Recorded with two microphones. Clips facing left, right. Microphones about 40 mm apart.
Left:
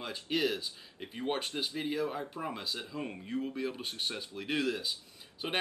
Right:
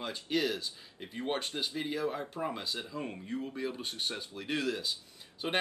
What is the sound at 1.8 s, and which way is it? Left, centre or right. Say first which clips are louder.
Speech: even; centre.